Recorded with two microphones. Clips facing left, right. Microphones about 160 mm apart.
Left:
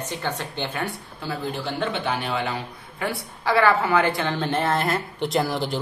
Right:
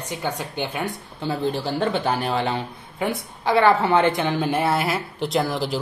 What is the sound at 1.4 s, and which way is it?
Speech, 35° right (ahead or behind).